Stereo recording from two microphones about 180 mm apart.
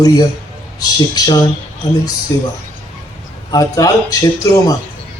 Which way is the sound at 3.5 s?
20° left (ahead or behind).